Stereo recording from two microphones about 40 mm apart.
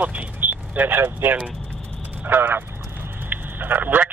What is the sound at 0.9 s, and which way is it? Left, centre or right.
Speech, right.